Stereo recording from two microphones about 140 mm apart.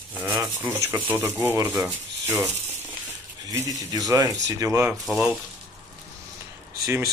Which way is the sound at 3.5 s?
25° right (ahead or behind).